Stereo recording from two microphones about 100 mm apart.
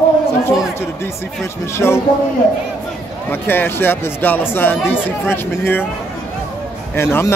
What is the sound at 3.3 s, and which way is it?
Speech, 20° left (ahead or behind).